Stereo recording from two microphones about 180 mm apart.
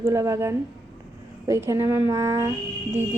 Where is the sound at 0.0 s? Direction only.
15° right (ahead or behind).